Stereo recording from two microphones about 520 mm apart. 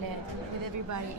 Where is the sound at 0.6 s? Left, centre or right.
Right.